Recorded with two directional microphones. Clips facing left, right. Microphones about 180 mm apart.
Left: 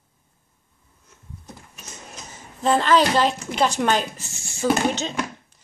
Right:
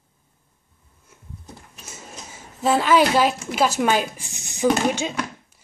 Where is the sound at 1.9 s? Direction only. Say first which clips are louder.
Right 1 dB; 5° right (ahead or behind).